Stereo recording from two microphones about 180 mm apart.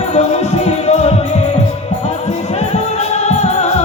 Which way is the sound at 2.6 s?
35° left (ahead or behind).